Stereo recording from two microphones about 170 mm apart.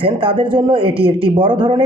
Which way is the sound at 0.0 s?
30° right (ahead or behind).